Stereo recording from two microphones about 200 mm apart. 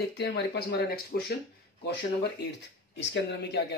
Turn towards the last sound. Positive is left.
turn(degrees=55)  # may be behind; listen again after turning